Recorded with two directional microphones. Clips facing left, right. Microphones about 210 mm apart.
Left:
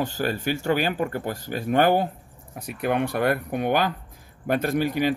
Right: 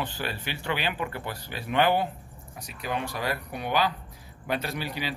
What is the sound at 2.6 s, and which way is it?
A man's voice, 55° left (ahead or behind).